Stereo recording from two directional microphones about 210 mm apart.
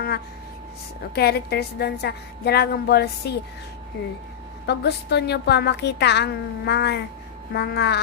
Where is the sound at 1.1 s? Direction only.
50° left (ahead or behind).